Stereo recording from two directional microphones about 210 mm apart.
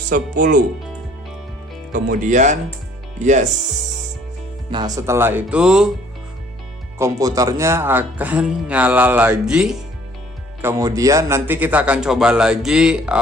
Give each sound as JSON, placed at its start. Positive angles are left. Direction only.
{"t": 0.1, "sound": "speech", "side_deg": -40}
{"t": 1.9, "sound": "speech", "side_deg": -40}
{"t": 4.7, "sound": "speech", "side_deg": -15}
{"t": 7.0, "sound": "speech", "side_deg": -15}
{"t": 10.6, "sound": "speech", "side_deg": -15}